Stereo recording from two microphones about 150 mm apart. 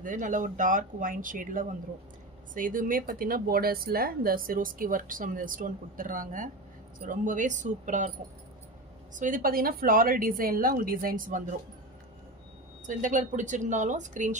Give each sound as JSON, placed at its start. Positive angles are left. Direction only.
{"t": 0.0, "sound": "a woman's voice", "side_deg": -60}
{"t": 9.1, "sound": "a woman's voice", "side_deg": -60}
{"t": 12.8, "sound": "a woman's voice", "side_deg": -60}